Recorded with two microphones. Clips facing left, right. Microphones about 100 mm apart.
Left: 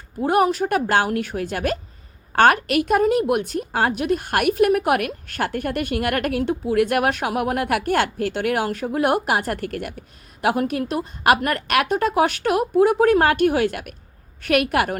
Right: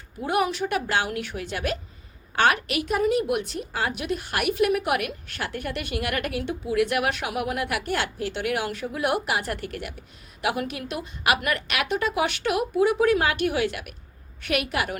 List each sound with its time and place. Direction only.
0.2 s a woman's voice: 45° left (ahead or behind)